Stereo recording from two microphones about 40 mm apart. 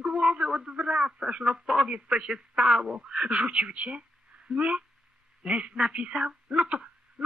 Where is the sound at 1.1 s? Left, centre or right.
Right.